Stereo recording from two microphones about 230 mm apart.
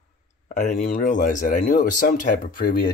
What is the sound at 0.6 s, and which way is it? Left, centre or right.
Speech, left.